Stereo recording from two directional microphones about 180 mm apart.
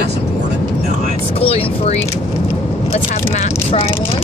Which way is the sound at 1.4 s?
35° left (ahead or behind).